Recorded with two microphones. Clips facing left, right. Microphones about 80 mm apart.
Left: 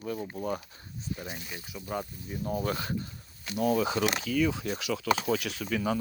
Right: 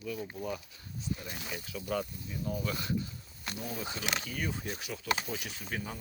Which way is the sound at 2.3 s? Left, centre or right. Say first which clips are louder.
Left 7 dB; left.